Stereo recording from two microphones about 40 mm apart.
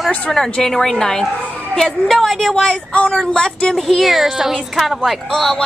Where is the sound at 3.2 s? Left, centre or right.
Centre.